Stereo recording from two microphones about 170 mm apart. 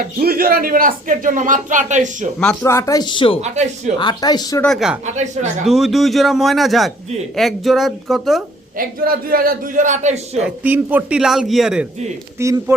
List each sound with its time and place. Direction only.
0.0 s speech: 60° right (ahead or behind); by 2.3 s 45° right (ahead or behind)
2.6 s speech: 15° left (ahead or behind)
3.4 s speech: 40° right (ahead or behind)
3.9 s speech: 25° left (ahead or behind)
4.6 s a man's voice: centre (ahead or behind)
5.0 s speech: 45° right (ahead or behind)
5.6 s a man's voice: centre (ahead or behind)
8.8 s speech: 60° right (ahead or behind); by 10.4 s 45° right (ahead or behind)
10.4 s a man's voice: 10° right (ahead or behind)
12.4 s a man's voice: 15° right (ahead or behind)